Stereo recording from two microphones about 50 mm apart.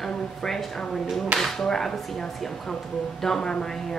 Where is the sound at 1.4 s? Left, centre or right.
Centre.